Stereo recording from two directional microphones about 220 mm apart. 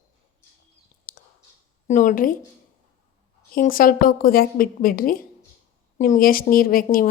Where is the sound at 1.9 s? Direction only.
35° left (ahead or behind).